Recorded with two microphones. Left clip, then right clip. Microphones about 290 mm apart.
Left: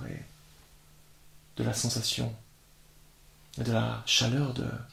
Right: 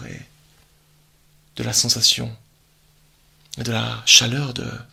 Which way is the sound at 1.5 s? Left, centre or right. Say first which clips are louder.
Right 12 dB; right.